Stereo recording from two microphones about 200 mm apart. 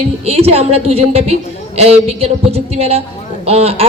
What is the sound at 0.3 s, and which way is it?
A woman's voice, 30° right (ahead or behind).